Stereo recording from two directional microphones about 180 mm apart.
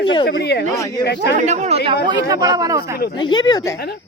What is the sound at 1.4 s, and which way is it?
Speech, 40° right (ahead or behind).